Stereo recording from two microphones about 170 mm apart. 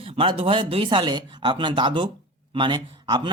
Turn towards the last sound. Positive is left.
turn(degrees=-30)  # may be behind; listen again after turning